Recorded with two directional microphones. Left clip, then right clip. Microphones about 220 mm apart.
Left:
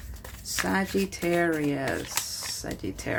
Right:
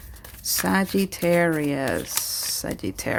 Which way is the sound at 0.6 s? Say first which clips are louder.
Right 3 dB; 55° right (ahead or behind).